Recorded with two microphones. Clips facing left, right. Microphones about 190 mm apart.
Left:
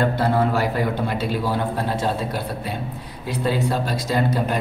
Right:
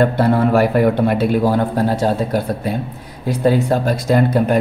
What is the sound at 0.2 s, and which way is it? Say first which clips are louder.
Speech: right 6 dB; 60° right (ahead or behind).